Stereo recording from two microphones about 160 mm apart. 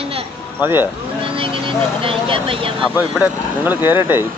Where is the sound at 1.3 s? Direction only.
35° right (ahead or behind).